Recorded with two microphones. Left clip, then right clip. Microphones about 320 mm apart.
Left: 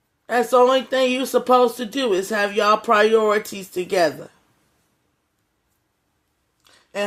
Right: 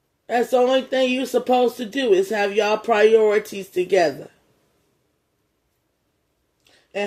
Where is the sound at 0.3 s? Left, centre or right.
Left.